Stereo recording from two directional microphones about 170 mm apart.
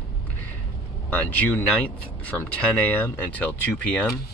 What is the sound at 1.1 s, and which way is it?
Speech, 10° left (ahead or behind).